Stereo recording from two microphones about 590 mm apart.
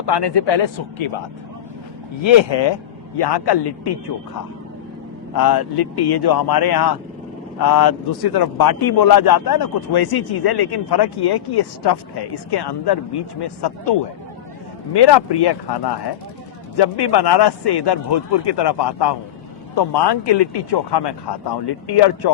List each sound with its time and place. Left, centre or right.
0.0 s a man's voice: left
2.2 s a man's voice: left
5.3 s a man's voice: left